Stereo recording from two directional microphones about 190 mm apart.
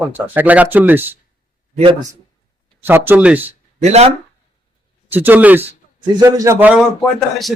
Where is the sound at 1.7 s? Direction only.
30° right (ahead or behind).